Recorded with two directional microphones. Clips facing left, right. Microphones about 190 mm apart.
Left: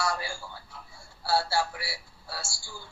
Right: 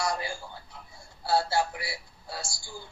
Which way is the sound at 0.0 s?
20° right (ahead or behind).